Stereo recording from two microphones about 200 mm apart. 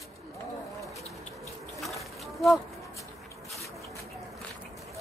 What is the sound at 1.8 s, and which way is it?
Bee, centre (ahead or behind).